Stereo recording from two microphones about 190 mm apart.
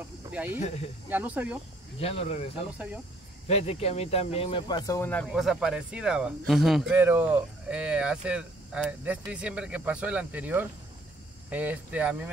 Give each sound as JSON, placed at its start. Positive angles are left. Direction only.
{"t": 0.3, "sound": "speech", "side_deg": -10}
{"t": 2.0, "sound": "speech", "side_deg": 30}
{"t": 5.3, "sound": "speech", "side_deg": 0}